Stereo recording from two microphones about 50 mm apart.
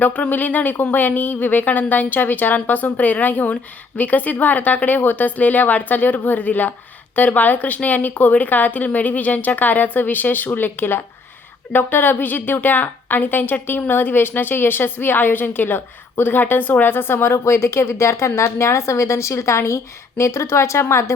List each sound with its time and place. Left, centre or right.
0.0 s a woman's voice: left